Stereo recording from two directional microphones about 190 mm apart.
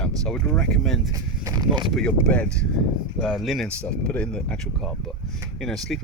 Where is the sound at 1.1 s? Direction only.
20° right (ahead or behind).